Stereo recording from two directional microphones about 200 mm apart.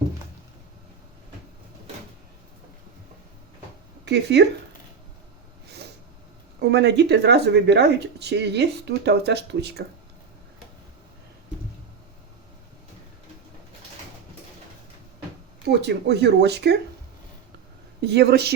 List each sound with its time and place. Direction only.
4.0 s speech: 55° right (ahead or behind)
6.6 s speech: 55° right (ahead or behind)
15.7 s speech: 55° right (ahead or behind)
18.0 s speech: 55° right (ahead or behind)